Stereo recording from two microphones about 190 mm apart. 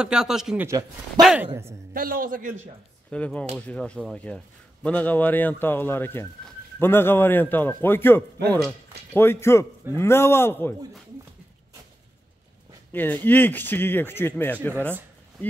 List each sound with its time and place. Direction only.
0.0 s a man's voice: 5° right (ahead or behind)
0.7 s a man's voice: 20° right (ahead or behind)
1.2 s a man's voice: 5° right (ahead or behind)
2.0 s a man's voice: 50° right (ahead or behind)
3.1 s a man's voice: 5° left (ahead or behind)
8.5 s a man's voice: centre (ahead or behind)
9.1 s speech: 10° left (ahead or behind)
12.9 s speech: 10° left (ahead or behind)